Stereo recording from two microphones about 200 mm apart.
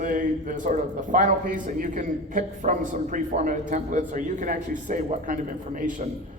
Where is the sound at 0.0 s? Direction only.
40° right (ahead or behind).